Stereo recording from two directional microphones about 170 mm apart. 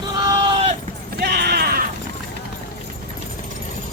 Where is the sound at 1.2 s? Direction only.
70° right (ahead or behind).